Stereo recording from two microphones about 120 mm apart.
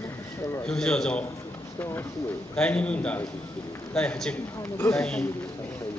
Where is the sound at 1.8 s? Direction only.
20° left (ahead or behind).